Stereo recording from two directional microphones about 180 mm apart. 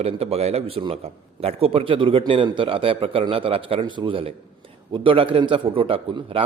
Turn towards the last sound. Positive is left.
turn(degrees=-30)  # may be behind; listen again after turning